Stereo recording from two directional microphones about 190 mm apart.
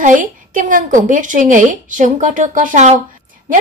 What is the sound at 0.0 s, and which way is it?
A woman's voice, 45° right (ahead or behind).